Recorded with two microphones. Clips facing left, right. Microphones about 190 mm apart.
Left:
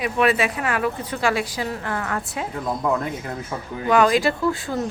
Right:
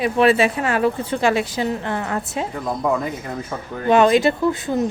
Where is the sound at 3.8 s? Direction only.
25° right (ahead or behind).